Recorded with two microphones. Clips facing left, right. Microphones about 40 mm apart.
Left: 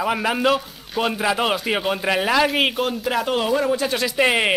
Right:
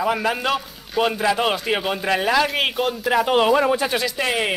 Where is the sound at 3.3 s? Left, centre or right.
Right.